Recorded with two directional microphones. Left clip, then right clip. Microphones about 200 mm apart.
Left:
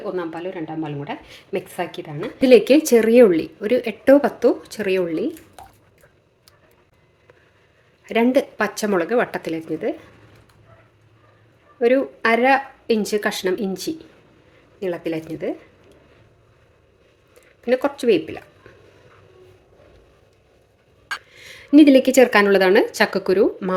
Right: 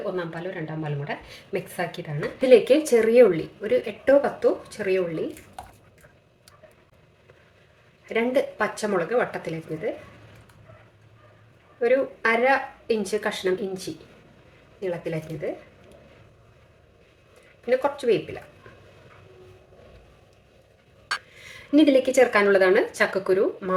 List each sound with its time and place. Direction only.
0.2 s speech: 35° left (ahead or behind)
8.0 s speech: 50° left (ahead or behind)
11.8 s speech: 50° left (ahead or behind)
17.7 s speech: 50° left (ahead or behind)
21.3 s speech: 40° left (ahead or behind)